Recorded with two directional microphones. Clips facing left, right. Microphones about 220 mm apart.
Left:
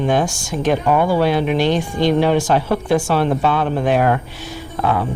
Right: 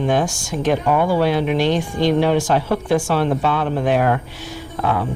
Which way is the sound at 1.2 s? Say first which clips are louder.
Left 1 dB; 10° left (ahead or behind).